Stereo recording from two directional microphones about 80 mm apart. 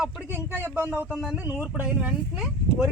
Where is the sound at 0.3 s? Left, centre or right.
Right.